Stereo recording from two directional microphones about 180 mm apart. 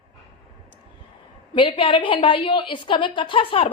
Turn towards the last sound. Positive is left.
turn(degrees=30)  # may be behind; listen again after turning